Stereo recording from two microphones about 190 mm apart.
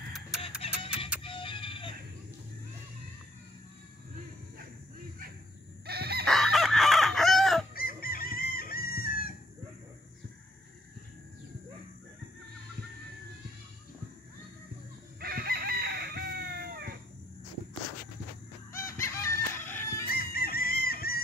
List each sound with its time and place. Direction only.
0.6 s music: 30° left (ahead or behind)
5.9 s chicken: 55° right (ahead or behind)
6.2 s chicken: centre (ahead or behind)
7.7 s chicken: 50° left (ahead or behind)
15.1 s chicken: 55° right (ahead or behind)
18.7 s fowl: 15° left (ahead or behind)
20.1 s chicken: 50° left (ahead or behind)